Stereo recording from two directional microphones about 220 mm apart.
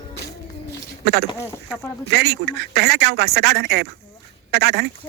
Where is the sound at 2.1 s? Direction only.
50° right (ahead or behind).